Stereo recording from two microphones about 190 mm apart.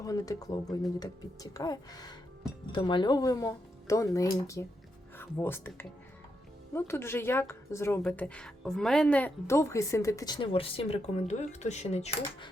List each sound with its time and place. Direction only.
0.0 s a woman's voice: 20° left (ahead or behind); by 12.5 s 35° left (ahead or behind)